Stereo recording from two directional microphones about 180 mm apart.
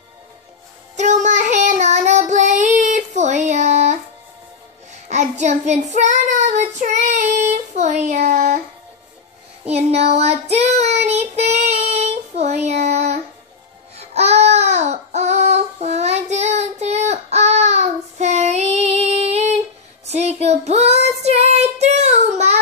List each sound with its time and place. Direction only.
0.9 s child singing: 40° right (ahead or behind)
5.0 s child singing: 40° right (ahead or behind)
9.7 s child singing: 35° right (ahead or behind)
13.9 s baby cry: 35° right (ahead or behind)
20.1 s child singing: 35° right (ahead or behind)